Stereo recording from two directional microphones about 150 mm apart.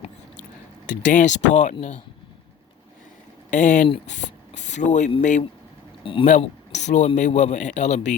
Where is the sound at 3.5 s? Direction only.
60° left (ahead or behind).